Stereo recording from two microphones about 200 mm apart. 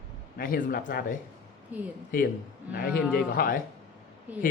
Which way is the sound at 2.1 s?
45° left (ahead or behind).